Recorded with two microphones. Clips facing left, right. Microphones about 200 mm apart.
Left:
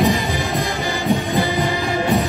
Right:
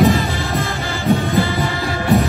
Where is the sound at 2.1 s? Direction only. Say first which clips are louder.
Right 5 dB; centre (ahead or behind).